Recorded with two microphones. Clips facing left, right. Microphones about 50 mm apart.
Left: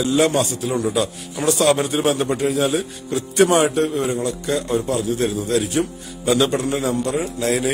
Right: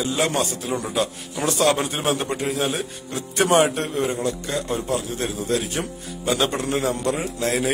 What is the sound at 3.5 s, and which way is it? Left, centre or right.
Speech, centre.